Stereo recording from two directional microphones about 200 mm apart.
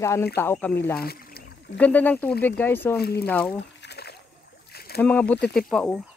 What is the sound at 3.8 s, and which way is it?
Splash, 55° left (ahead or behind).